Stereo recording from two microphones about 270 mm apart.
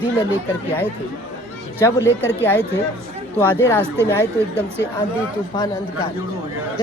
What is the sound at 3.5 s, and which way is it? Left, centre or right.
Speech, centre.